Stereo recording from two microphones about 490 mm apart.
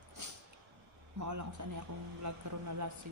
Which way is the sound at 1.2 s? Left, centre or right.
Right.